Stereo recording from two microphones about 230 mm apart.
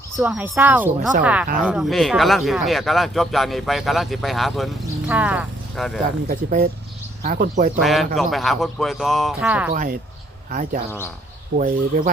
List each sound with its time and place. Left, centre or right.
0.2 s speech: centre
6.2 s speech: right
7.8 s speech: centre
9.7 s speech: right